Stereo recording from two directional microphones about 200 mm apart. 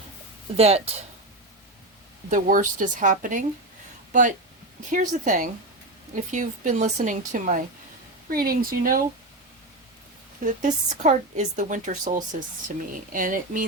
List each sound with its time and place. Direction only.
0.5 s speech: 30° right (ahead or behind)
2.3 s speech: 40° right (ahead or behind)
10.4 s speech: 40° right (ahead or behind)